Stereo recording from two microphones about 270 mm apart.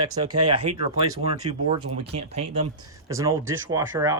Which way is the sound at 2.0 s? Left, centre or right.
Right.